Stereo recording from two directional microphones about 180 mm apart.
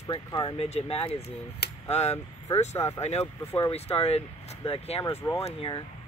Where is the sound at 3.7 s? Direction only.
35° left (ahead or behind).